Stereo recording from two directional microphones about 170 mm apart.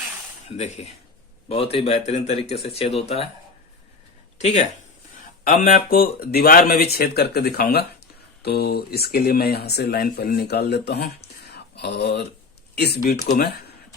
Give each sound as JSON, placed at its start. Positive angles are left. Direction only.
{"t": 0.4, "sound": "speech", "side_deg": 40}
{"t": 4.4, "sound": "speech", "side_deg": 40}
{"t": 5.5, "sound": "speech", "side_deg": 55}